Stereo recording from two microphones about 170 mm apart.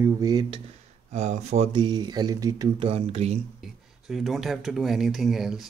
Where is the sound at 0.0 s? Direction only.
20° right (ahead or behind).